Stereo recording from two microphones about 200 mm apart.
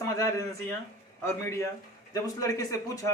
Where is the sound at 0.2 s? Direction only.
15° left (ahead or behind).